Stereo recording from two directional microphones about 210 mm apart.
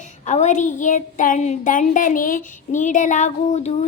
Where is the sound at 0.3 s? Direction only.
35° left (ahead or behind).